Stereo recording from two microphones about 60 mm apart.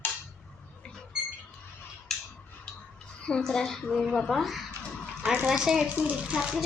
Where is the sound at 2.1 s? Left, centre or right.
Centre.